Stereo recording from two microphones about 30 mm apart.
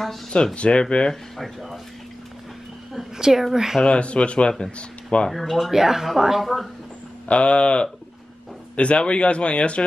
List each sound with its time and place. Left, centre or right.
0.6 s speech: left
1.3 s speech: centre
3.2 s speech: centre
3.8 s speech: left
5.3 s speech: centre
5.7 s speech: centre
7.2 s speech: left